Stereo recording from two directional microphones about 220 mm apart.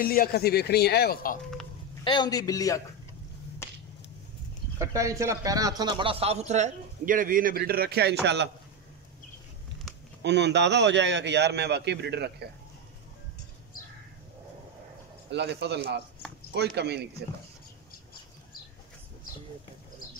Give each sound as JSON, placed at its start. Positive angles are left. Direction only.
{"t": 0.0, "sound": "speech", "side_deg": 40}
{"t": 2.0, "sound": "a man's voice", "side_deg": 20}
{"t": 4.7, "sound": "a man's voice", "side_deg": -15}
{"t": 10.2, "sound": "a man's voice", "side_deg": -50}
{"t": 15.2, "sound": "a man's voice", "side_deg": -50}